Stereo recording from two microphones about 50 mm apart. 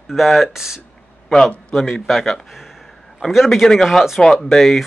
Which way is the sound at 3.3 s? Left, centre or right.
Centre.